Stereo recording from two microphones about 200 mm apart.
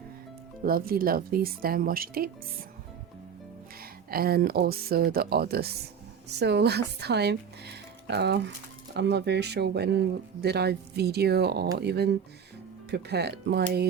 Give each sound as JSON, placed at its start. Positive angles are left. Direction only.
{"t": 0.6, "sound": "speech", "side_deg": -45}
{"t": 3.8, "sound": "speech", "side_deg": -50}